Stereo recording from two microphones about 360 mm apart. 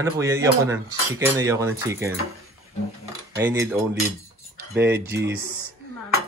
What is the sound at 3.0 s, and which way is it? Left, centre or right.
Cutlery, centre.